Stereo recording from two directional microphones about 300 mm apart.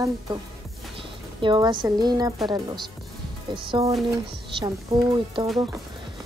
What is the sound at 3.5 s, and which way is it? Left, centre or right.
Speech, centre.